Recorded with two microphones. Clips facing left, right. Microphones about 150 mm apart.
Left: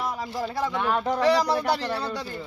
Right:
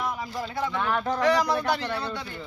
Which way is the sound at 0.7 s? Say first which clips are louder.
Left 1 dB; 15° left (ahead or behind).